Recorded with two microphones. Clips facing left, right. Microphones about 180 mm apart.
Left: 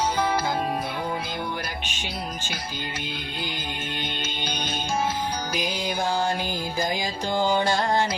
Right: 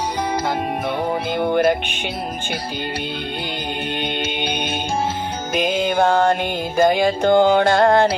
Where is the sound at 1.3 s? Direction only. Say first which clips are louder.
Right 14 dB; 55° right (ahead or behind).